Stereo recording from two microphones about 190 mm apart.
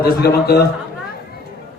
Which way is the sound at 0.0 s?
55° left (ahead or behind).